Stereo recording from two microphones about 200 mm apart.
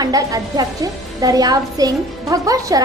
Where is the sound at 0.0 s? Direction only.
15° right (ahead or behind).